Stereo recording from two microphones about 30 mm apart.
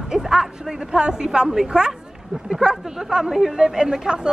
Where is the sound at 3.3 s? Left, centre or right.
Centre.